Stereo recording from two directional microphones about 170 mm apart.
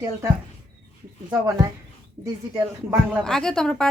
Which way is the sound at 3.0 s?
5° left (ahead or behind).